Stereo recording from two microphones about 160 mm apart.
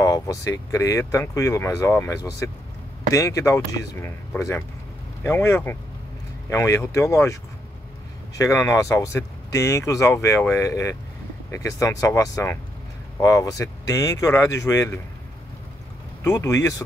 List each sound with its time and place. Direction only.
0.0 s speech: 20° left (ahead or behind)
8.4 s speech: 20° left (ahead or behind)
16.3 s speech: 20° left (ahead or behind)